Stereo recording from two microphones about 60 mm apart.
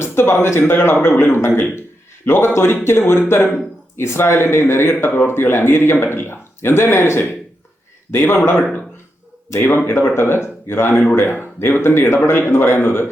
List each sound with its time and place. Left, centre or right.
0.0 s a man's voice: left
9.5 s a man's voice: left